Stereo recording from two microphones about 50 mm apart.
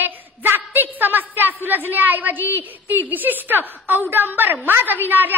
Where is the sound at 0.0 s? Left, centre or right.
Right.